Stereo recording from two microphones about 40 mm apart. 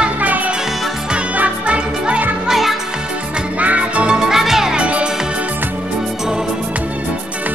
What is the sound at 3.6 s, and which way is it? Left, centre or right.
Music, right.